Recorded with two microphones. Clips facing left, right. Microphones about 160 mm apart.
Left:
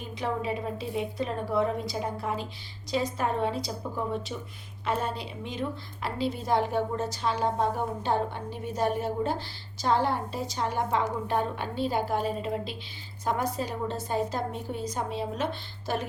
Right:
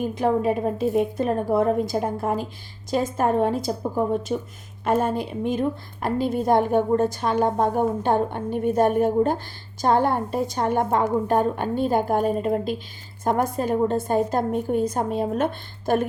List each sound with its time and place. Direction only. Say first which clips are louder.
0.0 s a woman's voice: right 10 dB; 50° right (ahead or behind)